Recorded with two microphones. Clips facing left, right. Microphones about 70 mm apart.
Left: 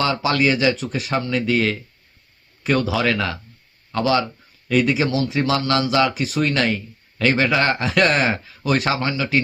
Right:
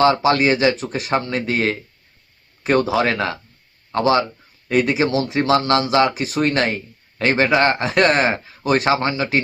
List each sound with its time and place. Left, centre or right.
0.0 s speech: right